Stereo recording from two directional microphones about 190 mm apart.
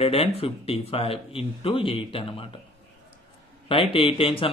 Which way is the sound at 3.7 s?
30° left (ahead or behind).